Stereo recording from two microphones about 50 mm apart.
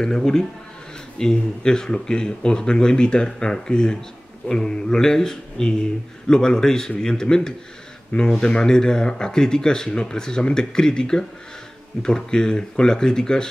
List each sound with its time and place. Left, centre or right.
0.0 s speech: centre